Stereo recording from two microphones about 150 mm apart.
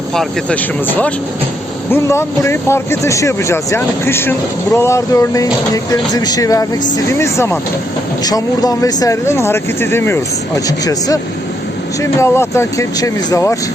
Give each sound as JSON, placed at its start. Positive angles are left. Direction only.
{"t": 0.1, "sound": "speech", "side_deg": 5}